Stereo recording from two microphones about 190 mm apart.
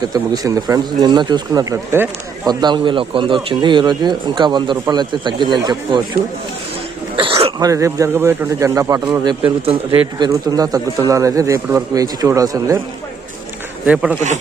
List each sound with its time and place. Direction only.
0.1 s speech: 20° right (ahead or behind)
7.2 s speech: 30° right (ahead or behind)
7.7 s a man's voice: 15° right (ahead or behind)
9.2 s speech: 25° right (ahead or behind)
13.8 s a man's voice: 5° right (ahead or behind)